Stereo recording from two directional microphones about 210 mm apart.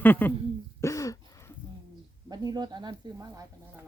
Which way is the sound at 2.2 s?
20° right (ahead or behind).